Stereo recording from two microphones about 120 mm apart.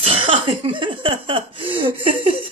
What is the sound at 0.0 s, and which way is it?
Speech, 50° right (ahead or behind).